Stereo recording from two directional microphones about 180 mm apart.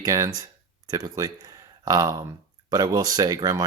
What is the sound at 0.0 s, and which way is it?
Speech, 20° right (ahead or behind).